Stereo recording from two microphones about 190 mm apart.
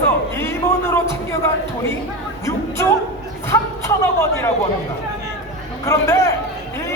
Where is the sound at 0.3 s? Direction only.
15° left (ahead or behind).